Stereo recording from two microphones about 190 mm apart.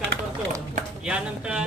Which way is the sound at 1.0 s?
5° right (ahead or behind).